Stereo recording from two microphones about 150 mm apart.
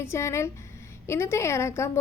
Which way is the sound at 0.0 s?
20° left (ahead or behind).